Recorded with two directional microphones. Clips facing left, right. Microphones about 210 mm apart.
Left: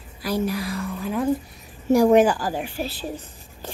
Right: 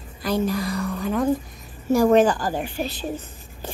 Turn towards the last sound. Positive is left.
turn(degrees=5)  # may be behind; listen again after turning